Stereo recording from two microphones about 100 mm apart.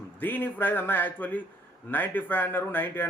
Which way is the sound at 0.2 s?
20° left (ahead or behind).